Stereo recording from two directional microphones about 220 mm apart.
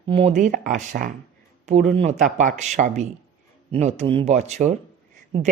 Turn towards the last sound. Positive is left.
turn(degrees=-30)  # may be behind; listen again after turning